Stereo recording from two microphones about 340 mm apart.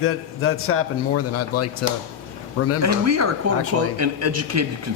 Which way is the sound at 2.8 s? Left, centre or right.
Right.